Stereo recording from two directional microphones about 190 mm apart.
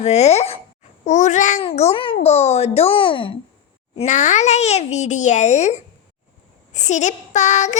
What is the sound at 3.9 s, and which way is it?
A child's voice, 40° left (ahead or behind).